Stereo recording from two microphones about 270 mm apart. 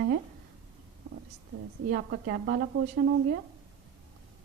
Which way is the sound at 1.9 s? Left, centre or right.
Right.